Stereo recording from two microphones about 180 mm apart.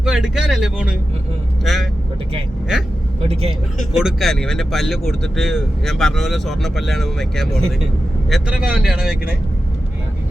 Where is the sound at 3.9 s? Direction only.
5° right (ahead or behind).